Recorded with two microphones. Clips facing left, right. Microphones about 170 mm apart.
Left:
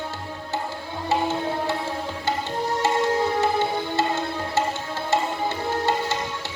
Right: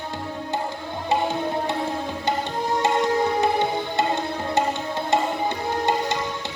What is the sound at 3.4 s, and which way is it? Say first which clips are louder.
Music: right 1 dB; 15° right (ahead or behind).